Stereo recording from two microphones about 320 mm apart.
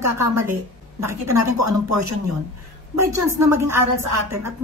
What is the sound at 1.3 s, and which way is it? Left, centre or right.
Speech, right.